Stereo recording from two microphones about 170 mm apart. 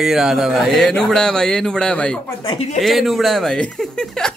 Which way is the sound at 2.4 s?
40° left (ahead or behind).